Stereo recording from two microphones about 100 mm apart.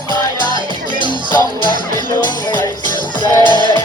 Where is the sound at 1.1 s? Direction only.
45° left (ahead or behind).